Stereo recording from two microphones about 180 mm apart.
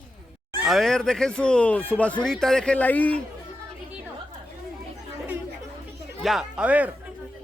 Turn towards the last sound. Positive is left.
turn(degrees=-10)  # may be behind; listen again after turning